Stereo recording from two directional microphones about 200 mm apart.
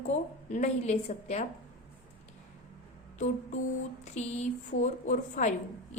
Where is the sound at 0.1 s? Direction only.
35° left (ahead or behind).